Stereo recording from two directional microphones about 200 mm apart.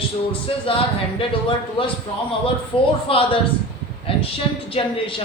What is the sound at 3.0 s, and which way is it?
Speech, 25° left (ahead or behind).